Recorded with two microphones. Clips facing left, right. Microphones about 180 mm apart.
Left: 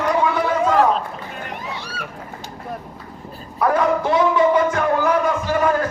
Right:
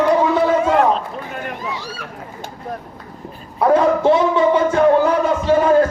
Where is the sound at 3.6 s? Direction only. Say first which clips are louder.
Right 4 dB; 25° right (ahead or behind).